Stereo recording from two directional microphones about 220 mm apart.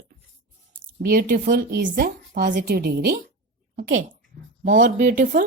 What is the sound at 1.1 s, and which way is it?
A woman's voice, 40° right (ahead or behind).